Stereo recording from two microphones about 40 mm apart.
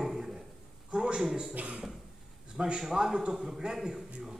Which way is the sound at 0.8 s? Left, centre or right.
Right.